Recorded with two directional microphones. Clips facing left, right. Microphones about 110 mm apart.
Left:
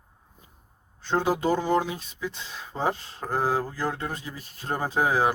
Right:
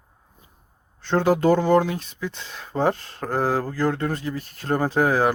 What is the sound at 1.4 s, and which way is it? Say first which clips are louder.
Speech: right 6 dB; 50° right (ahead or behind).